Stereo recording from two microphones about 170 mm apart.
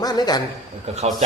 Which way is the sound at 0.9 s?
40° right (ahead or behind).